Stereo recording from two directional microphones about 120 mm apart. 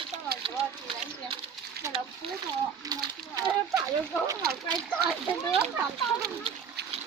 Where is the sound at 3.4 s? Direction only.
30° right (ahead or behind).